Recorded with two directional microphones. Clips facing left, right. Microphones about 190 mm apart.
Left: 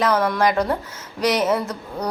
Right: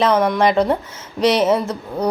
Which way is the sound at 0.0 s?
25° right (ahead or behind).